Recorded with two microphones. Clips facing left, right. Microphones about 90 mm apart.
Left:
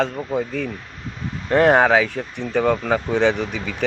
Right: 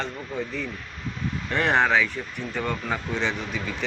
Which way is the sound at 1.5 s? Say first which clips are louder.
Left 8 dB; 45° left (ahead or behind).